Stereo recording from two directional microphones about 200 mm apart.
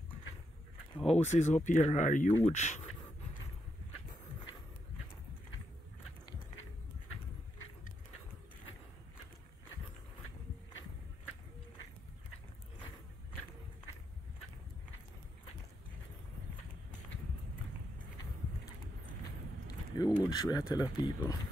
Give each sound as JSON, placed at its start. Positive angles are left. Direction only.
{"t": 0.9, "sound": "speech", "side_deg": 30}
{"t": 19.7, "sound": "biting", "side_deg": 20}
{"t": 20.2, "sound": "speech", "side_deg": 20}